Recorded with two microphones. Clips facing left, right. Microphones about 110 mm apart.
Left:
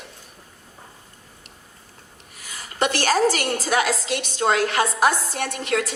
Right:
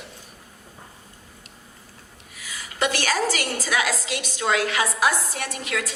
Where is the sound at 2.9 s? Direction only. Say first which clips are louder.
Left 5 dB; 30° left (ahead or behind).